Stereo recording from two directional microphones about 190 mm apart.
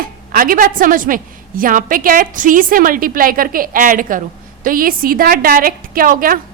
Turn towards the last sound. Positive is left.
turn(degrees=-50)  # may be behind; listen again after turning